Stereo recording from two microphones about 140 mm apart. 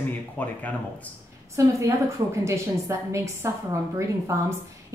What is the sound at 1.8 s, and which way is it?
A woman's voice, 20° right (ahead or behind).